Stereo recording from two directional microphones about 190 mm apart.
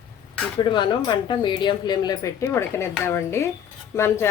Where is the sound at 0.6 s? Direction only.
25° left (ahead or behind).